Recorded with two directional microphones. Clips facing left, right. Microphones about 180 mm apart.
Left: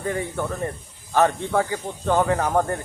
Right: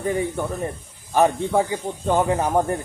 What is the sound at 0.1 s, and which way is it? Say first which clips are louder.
Speech: right 2 dB; 15° right (ahead or behind).